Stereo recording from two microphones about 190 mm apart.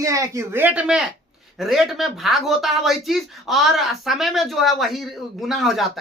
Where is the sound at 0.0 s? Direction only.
15° right (ahead or behind).